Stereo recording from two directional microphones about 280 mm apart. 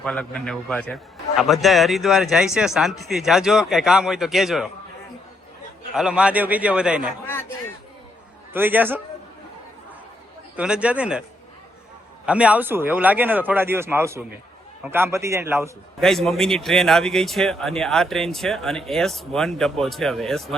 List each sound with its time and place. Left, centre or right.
0.0 s a man's voice: centre
5.9 s a man's voice: centre
8.5 s speech: centre
10.6 s a man's voice: centre
12.2 s a man's voice: centre